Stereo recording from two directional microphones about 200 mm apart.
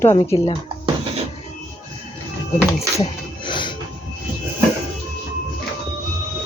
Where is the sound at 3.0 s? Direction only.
25° left (ahead or behind).